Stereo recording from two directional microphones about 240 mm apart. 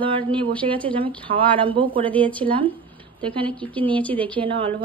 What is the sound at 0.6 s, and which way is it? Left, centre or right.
A woman's voice, right.